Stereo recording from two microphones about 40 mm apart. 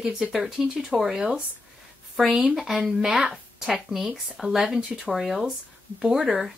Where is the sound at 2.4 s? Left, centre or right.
Centre.